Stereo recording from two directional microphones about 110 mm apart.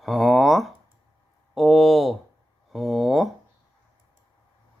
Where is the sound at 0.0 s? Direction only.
Centre (ahead or behind).